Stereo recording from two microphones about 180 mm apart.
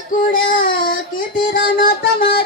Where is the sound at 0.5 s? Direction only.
50° left (ahead or behind).